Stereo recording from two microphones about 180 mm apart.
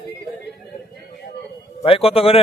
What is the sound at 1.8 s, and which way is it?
Speech, 30° left (ahead or behind).